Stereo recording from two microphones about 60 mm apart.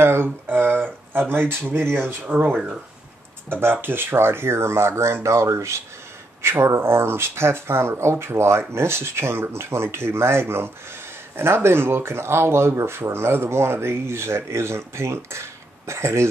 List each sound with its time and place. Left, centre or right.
0.0 s a sound: right
1.5 s speech: right
2.2 s speech: right
6.4 s speech: right